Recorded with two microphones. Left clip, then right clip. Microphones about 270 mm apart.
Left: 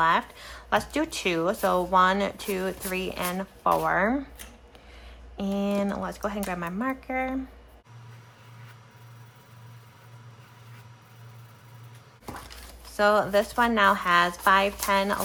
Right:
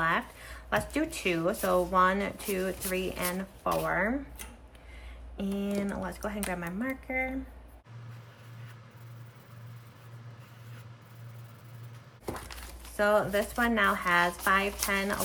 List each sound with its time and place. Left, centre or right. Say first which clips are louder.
0.0 s speech: left 6 dB; centre
5.4 s speech: left 6 dB; centre
13.0 s speech: left 4 dB; centre